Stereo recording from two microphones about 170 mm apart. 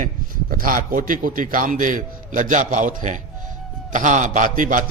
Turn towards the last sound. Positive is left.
turn(degrees=-50)  # may be behind; listen again after turning